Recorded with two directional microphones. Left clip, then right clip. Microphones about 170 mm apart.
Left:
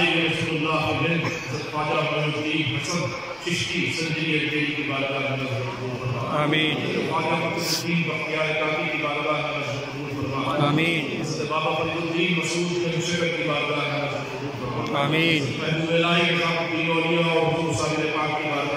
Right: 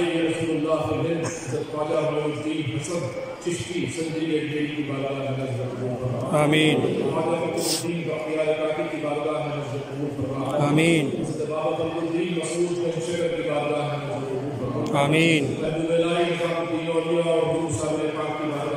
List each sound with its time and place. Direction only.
6.3 s mantra: 25° right (ahead or behind)
10.8 s mantra: 30° right (ahead or behind)
15.0 s mantra: 20° right (ahead or behind)